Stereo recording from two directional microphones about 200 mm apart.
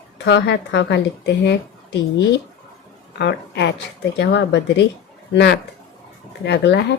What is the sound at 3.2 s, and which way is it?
A woman's voice, 60° left (ahead or behind).